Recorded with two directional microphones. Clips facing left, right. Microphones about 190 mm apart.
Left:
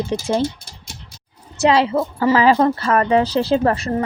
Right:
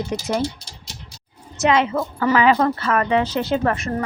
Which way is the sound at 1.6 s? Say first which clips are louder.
Left 3 dB; 35° left (ahead or behind).